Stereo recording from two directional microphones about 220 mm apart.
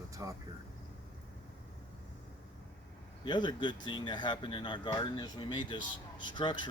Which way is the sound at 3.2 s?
20° left (ahead or behind).